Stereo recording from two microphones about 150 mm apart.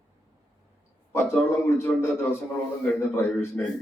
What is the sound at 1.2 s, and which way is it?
Speech, 15° left (ahead or behind).